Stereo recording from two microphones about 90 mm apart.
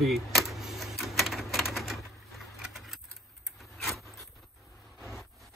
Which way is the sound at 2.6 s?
Centre (ahead or behind).